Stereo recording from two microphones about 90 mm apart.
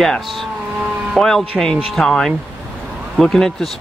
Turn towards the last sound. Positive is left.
turn(degrees=5)  # may be behind; listen again after turning